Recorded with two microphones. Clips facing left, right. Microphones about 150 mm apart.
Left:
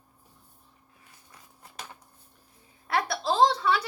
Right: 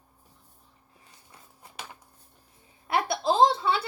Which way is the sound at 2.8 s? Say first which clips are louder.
Right 2 dB; 20° right (ahead or behind).